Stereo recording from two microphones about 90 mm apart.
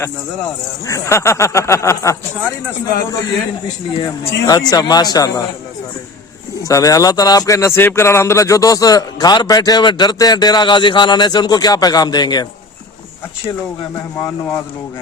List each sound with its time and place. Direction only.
0.9 s speech: 35° left (ahead or behind)
2.8 s speech: 45° left (ahead or behind)
3.9 s speech: 75° left (ahead or behind)
4.4 s speech: 45° left (ahead or behind)
6.6 s speech: 40° left (ahead or behind)